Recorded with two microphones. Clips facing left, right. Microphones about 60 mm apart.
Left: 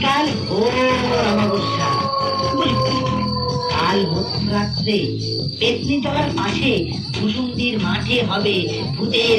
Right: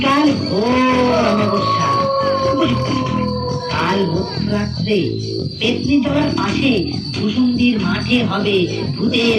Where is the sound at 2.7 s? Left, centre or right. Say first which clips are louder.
Right 1 dB; centre.